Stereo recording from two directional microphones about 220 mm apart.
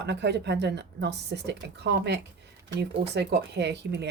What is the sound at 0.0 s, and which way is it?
A woman's voice, 50° right (ahead or behind).